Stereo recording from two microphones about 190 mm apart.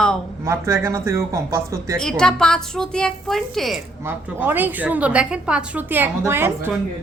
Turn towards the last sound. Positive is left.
turn(degrees=-10)  # may be behind; listen again after turning